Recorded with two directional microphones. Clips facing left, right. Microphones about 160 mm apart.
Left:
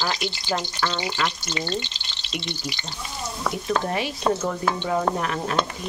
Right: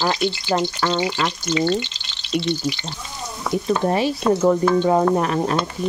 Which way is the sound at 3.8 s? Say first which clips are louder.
Right 6 dB; 35° right (ahead or behind).